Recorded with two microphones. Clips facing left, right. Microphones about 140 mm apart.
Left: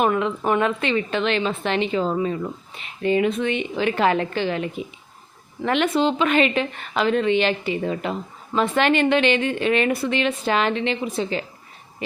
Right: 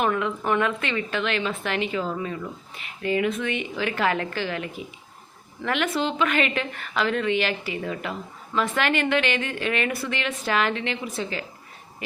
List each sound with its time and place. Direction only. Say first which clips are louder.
0.0 s a woman's voice: left 4 dB; 25° left (ahead or behind)